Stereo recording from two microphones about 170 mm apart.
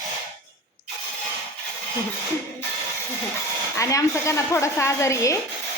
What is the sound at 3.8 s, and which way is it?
A woman's voice, 20° left (ahead or behind).